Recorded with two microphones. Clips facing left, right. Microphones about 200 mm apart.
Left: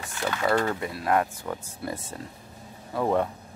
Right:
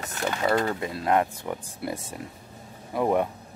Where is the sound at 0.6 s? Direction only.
25° right (ahead or behind).